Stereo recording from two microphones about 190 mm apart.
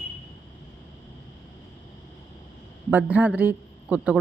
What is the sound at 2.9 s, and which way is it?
Speech, 10° right (ahead or behind).